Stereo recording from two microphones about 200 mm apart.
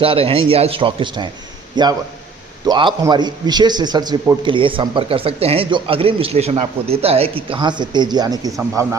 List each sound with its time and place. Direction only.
0.0 s a man's voice: 25° right (ahead or behind)